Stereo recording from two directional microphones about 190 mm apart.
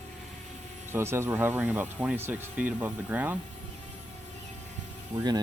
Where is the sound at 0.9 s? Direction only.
15° right (ahead or behind).